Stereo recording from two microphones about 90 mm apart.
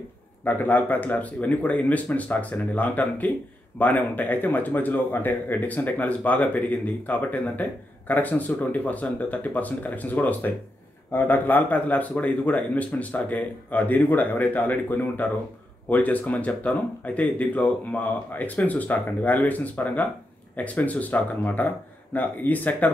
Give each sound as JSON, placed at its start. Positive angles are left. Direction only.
{"t": 0.4, "sound": "speech", "side_deg": 20}